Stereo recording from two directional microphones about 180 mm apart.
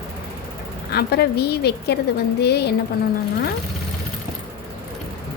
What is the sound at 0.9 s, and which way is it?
A woman's voice, 65° left (ahead or behind).